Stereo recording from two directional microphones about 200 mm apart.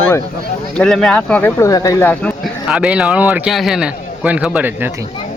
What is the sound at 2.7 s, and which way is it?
A man's voice, 5° right (ahead or behind).